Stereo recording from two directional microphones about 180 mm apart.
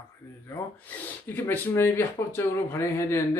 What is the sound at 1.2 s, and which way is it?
Speech, 10° left (ahead or behind).